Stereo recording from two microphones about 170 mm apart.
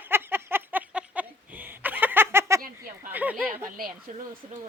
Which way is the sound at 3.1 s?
10° right (ahead or behind).